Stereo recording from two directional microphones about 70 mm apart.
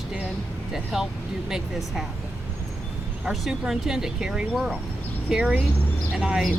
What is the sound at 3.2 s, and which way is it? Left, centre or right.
Speech, centre.